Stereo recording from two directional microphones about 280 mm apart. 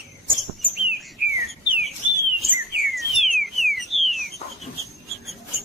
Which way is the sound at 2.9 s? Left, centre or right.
Centre.